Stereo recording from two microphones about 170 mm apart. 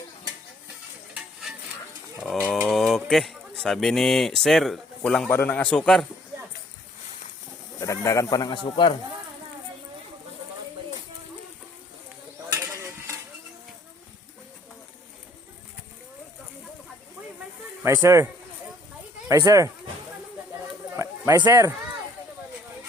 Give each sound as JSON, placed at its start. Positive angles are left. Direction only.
{"t": 1.1, "sound": "stir", "side_deg": -5}
{"t": 2.5, "sound": "speech", "side_deg": 5}
{"t": 7.8, "sound": "speech", "side_deg": 20}
{"t": 17.8, "sound": "speech", "side_deg": -20}
{"t": 19.3, "sound": "speech", "side_deg": -20}
{"t": 20.9, "sound": "a sound", "side_deg": -15}